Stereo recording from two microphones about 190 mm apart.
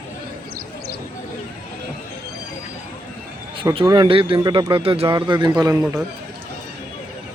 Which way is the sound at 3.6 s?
25° right (ahead or behind).